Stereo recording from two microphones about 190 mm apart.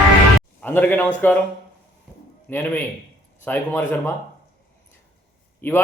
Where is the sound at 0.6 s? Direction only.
10° left (ahead or behind).